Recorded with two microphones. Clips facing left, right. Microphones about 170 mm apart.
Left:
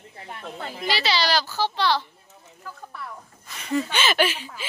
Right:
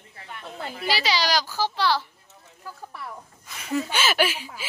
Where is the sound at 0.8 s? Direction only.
10° right (ahead or behind).